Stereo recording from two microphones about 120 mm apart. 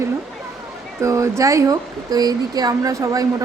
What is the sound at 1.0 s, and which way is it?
Speech, 25° right (ahead or behind).